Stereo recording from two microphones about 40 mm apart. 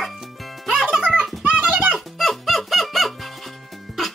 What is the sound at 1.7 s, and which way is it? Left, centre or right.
Music, right.